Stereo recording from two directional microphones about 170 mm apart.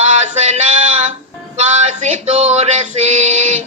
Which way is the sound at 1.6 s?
40° right (ahead or behind).